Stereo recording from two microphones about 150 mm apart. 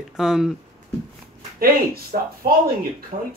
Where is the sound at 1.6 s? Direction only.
80° right.